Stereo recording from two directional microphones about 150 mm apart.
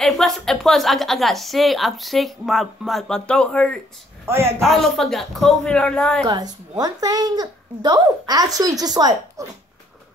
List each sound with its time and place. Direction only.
0.0 s a woman's voice: centre (ahead or behind)
4.3 s a man's voice: 15° right (ahead or behind)
4.6 s a woman's voice: centre (ahead or behind)
6.2 s a woman's voice: 25° right (ahead or behind)